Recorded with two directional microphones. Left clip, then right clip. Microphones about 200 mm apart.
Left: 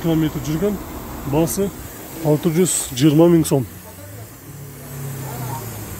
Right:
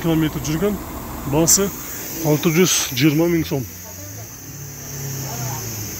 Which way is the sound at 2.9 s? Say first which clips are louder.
Left 7 dB; 25° left (ahead or behind).